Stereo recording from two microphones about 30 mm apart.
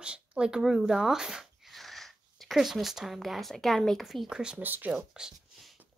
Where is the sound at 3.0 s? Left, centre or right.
Centre.